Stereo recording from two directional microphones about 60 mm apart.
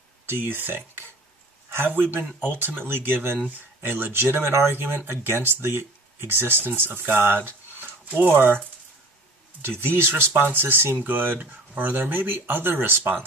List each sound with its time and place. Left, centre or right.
0.3 s speech: right